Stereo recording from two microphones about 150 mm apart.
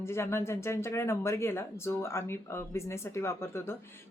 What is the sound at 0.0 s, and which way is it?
Speech, 15° left (ahead or behind).